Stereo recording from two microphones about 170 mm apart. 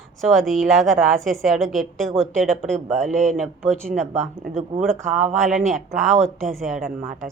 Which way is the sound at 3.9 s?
40° right (ahead or behind).